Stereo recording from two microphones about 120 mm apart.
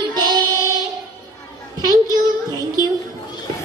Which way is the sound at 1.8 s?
30° right (ahead or behind).